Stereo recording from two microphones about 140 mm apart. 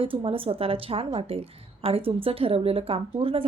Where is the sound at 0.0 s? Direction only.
40° right (ahead or behind).